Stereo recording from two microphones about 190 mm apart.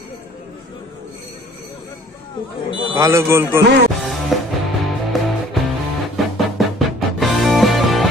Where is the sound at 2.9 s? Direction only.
15° right (ahead or behind).